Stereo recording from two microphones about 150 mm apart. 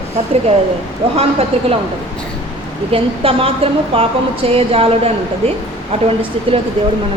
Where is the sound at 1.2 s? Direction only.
40° right (ahead or behind).